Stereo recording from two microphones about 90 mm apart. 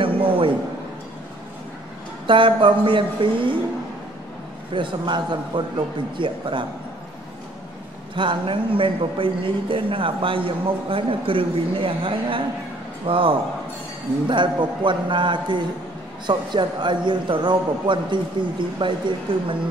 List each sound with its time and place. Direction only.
0.0 s a sound: 80° right
2.2 s a man's voice: 70° right (ahead or behind)
4.7 s a man's voice: 60° right (ahead or behind)
8.2 s a man's voice: 70° right (ahead or behind)
14.2 s a man's voice: 60° right (ahead or behind)